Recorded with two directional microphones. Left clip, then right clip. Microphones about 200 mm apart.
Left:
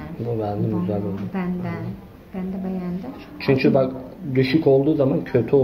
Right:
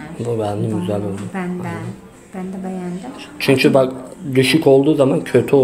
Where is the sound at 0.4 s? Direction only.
40° right (ahead or behind).